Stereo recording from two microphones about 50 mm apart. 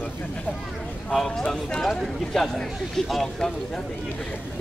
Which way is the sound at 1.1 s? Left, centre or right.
Centre.